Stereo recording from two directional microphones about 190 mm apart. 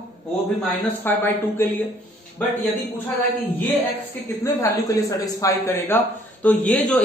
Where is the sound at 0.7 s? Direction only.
10° left (ahead or behind).